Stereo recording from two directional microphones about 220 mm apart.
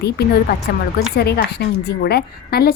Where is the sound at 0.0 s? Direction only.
50° left (ahead or behind).